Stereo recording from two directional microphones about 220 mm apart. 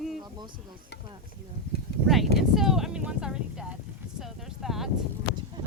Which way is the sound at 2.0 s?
Centre (ahead or behind).